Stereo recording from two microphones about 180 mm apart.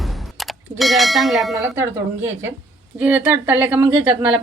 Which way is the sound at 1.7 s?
15° right (ahead or behind).